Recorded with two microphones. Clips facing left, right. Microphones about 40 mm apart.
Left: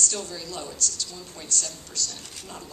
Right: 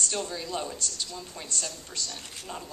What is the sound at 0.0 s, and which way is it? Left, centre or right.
A woman's voice, right.